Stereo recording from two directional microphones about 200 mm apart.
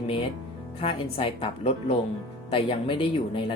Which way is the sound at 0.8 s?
25° left (ahead or behind).